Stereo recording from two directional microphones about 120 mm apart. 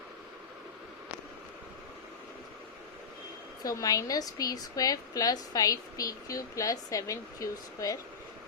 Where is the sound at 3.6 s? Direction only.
30° left (ahead or behind).